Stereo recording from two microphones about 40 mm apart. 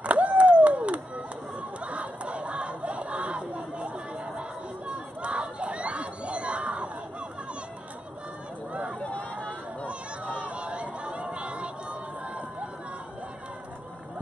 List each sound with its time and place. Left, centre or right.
0.0 s a sound: right
4.4 s crowd: right
9.8 s chatter: right